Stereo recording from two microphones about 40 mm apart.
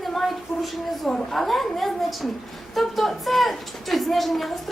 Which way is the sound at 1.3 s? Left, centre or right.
Centre.